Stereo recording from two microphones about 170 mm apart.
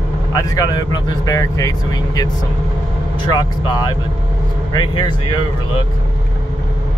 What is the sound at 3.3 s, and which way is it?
Speech, 25° left (ahead or behind).